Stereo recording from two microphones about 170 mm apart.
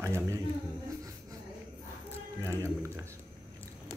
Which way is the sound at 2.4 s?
15° right (ahead or behind).